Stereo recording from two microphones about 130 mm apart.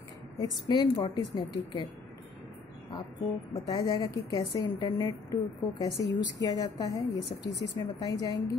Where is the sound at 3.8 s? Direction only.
30° left (ahead or behind).